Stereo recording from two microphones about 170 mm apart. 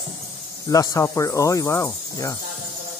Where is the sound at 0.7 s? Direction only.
20° left (ahead or behind).